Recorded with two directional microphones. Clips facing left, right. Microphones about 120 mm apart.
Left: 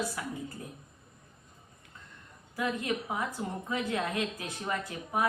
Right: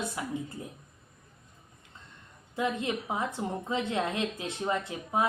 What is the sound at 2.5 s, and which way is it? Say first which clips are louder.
A woman's voice: right 2 dB; 20° right (ahead or behind).